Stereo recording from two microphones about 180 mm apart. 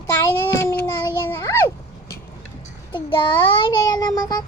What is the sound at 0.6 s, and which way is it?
A child's voice, 15° left (ahead or behind).